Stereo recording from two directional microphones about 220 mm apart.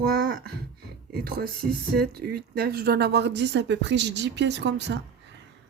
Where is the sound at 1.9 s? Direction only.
45° right (ahead or behind).